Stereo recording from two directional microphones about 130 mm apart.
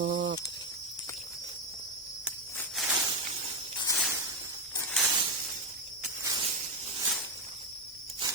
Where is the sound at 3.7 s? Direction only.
30° left (ahead or behind).